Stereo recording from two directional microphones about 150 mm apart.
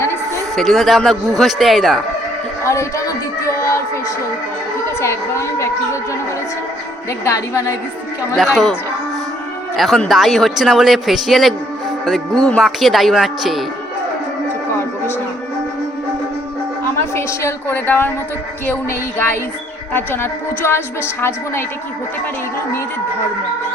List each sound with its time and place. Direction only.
0.5 s a man's voice: centre (ahead or behind)
4.9 s a woman's voice: 20° left (ahead or behind)
7.3 s a woman's voice: 20° left (ahead or behind)
8.4 s a man's voice: centre (ahead or behind)
9.7 s a man's voice: centre (ahead or behind)
17.2 s a woman's voice: 15° left (ahead or behind)
19.9 s a woman's voice: 15° left (ahead or behind)